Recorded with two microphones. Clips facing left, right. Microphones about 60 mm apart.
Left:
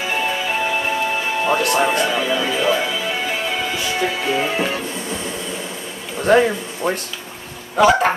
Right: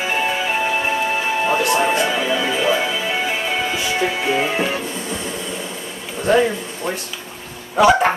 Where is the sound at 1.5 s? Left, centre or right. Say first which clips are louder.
Left 1 dB; left.